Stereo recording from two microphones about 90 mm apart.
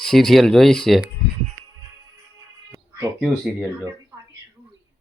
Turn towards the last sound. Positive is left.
turn(degrees=-10)  # may be behind; listen again after turning